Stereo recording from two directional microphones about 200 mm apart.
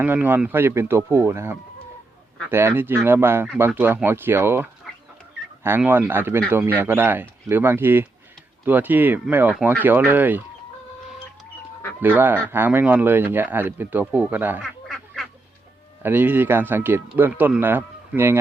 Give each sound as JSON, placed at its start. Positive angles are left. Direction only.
{"t": 0.0, "sound": "speech", "side_deg": -10}
{"t": 5.6, "sound": "speech", "side_deg": -10}
{"t": 12.0, "sound": "speech", "side_deg": -10}
{"t": 14.8, "sound": "quack", "side_deg": 0}
{"t": 16.0, "sound": "speech", "side_deg": -10}